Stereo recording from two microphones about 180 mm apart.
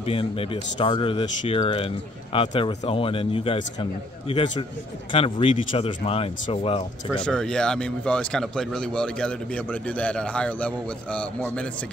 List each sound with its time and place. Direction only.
0.0 s speech: 30° left (ahead or behind)
7.2 s speech: 5° left (ahead or behind)